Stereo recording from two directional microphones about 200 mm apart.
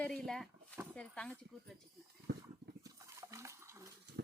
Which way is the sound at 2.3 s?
60° right (ahead or behind).